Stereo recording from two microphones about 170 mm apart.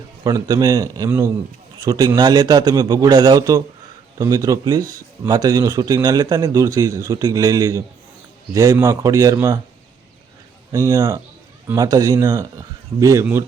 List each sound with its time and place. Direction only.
0.3 s speech: 20° right (ahead or behind)
10.7 s speech: 20° right (ahead or behind)